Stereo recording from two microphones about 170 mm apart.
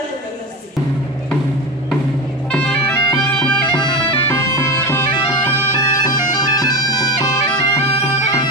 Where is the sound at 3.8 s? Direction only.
25° left (ahead or behind).